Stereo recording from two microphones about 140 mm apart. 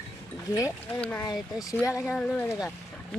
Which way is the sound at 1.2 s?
25° left (ahead or behind).